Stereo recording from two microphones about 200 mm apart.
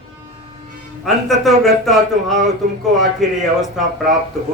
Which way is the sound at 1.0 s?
Centre (ahead or behind).